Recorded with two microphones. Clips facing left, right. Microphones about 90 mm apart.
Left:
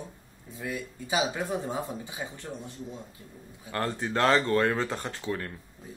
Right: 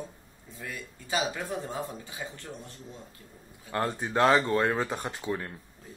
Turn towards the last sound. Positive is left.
turn(degrees=-15)  # may be behind; listen again after turning